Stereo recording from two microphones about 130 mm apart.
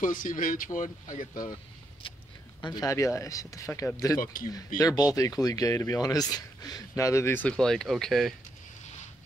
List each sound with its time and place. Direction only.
0.0 s speech: 90° left
0.7 s speech: 75° left (ahead or behind)
1.3 s speech: 30° left (ahead or behind)
2.6 s speech: 30° left (ahead or behind)
4.2 s speech: 90° left
4.7 s speech: 30° left (ahead or behind)
7.4 s speech: 5° left (ahead or behind)